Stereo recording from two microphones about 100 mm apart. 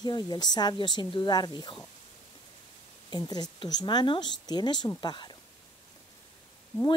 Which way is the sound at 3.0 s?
40° left (ahead or behind).